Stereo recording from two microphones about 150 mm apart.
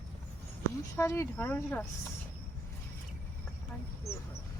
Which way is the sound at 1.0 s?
20° left (ahead or behind).